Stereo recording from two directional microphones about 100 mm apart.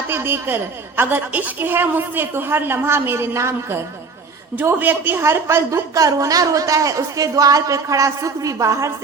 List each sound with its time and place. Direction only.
0.1 s a woman's voice: 20° right (ahead or behind)
5.9 s speech: 35° right (ahead or behind)